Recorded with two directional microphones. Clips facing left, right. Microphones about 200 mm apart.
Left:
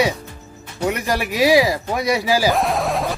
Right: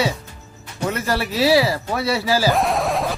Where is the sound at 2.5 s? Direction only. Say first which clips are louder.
Even; centre (ahead or behind).